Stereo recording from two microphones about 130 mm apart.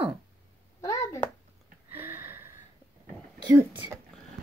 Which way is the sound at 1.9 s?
15° right (ahead or behind).